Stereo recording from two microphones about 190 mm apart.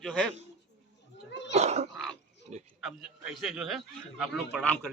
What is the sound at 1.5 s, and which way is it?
Speech, 35° right (ahead or behind).